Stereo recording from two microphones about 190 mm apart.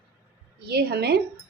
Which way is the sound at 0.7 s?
55° right (ahead or behind).